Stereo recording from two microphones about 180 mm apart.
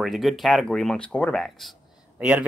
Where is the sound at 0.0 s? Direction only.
Centre (ahead or behind).